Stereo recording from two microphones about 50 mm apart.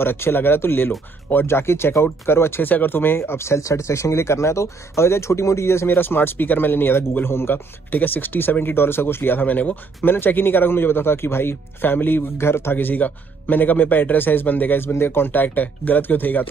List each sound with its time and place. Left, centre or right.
0.0 s speech: left
2.6 s speech: left
7.9 s speech: left
10.1 s speech: left
12.7 s speech: left